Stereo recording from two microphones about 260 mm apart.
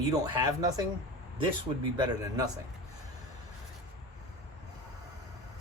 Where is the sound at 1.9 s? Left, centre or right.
Centre.